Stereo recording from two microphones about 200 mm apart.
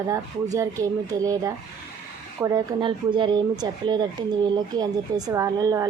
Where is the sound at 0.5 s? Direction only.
15° right (ahead or behind).